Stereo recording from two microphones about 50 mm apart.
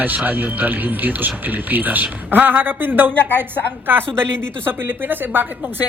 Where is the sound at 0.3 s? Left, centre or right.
Right.